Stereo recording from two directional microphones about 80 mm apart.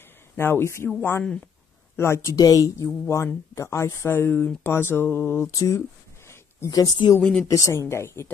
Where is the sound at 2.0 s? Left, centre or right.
Left.